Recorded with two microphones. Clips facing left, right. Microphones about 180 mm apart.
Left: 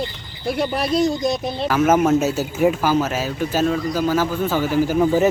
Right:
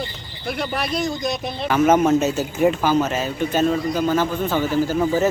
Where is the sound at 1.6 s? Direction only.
Centre (ahead or behind).